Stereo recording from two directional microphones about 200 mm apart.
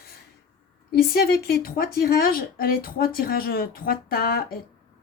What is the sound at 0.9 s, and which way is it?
Speech, 50° left (ahead or behind).